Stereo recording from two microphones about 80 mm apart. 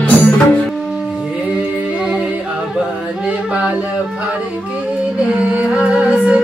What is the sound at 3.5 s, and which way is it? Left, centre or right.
Music, centre.